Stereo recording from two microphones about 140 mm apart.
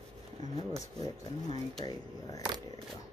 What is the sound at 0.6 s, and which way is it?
Speech, 40° right (ahead or behind).